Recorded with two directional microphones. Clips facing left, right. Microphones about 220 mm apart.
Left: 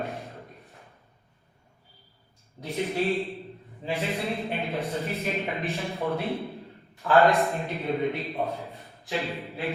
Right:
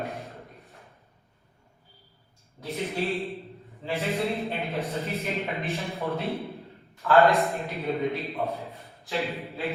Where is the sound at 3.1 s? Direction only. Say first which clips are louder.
Left 2 dB; centre (ahead or behind).